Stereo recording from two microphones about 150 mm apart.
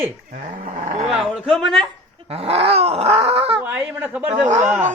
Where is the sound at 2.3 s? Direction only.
40° right (ahead or behind).